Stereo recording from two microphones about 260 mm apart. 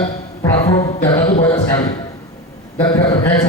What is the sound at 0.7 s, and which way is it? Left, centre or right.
A man's voice, left.